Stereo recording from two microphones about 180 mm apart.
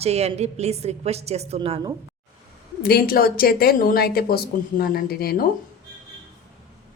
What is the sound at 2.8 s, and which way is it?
Speech, 55° left (ahead or behind).